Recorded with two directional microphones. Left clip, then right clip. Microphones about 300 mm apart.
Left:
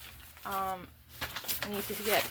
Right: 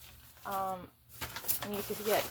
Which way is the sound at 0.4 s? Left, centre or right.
Left.